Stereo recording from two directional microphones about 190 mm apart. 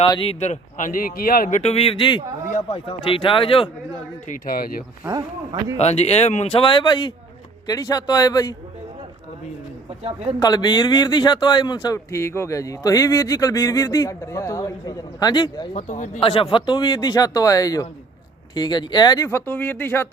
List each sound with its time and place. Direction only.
0.0 s a man's voice: 25° left (ahead or behind)
4.3 s speech: 50° left (ahead or behind)
5.0 s speech: 20° right (ahead or behind)
5.7 s a man's voice: 35° left (ahead or behind); by 8.5 s 20° left (ahead or behind)
10.4 s a man's voice: 20° left (ahead or behind)
15.7 s speech: 40° left (ahead or behind)
16.2 s a man's voice: 25° left (ahead or behind); by 20.1 s 10° left (ahead or behind)